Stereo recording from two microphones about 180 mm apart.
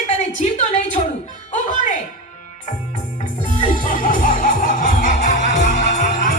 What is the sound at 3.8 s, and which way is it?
Music, 50° left (ahead or behind).